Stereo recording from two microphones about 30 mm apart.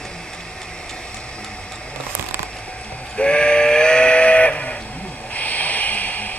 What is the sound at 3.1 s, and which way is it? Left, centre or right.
Steam whistle, left.